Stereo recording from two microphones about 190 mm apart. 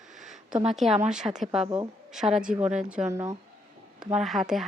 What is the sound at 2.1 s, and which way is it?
A woman's voice, centre (ahead or behind).